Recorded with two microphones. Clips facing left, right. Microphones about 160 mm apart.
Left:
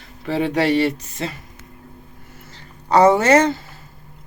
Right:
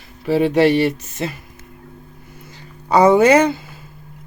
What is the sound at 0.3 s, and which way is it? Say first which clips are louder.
Speech: right 5 dB; 10° right (ahead or behind).